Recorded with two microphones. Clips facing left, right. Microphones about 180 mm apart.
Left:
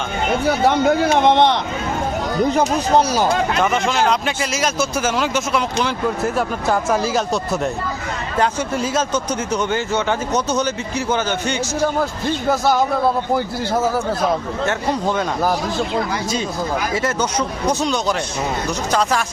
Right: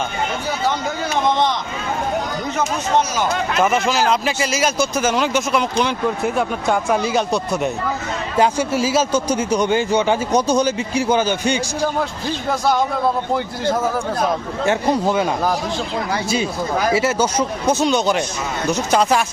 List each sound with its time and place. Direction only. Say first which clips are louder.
0.4 s speech: left 9 dB; 65° left (ahead or behind)
2.5 s speech: left 2 dB; 35° left (ahead or behind)
3.6 s speech: right 5 dB; 5° right (ahead or behind)
11.9 s a man's voice: left 2 dB; centre (ahead or behind)
14.7 s speech: right 4 dB; 10° right (ahead or behind)
16.9 s speech: right 3 dB; 10° right (ahead or behind)
18.9 s speech: right 2 dB; 20° right (ahead or behind)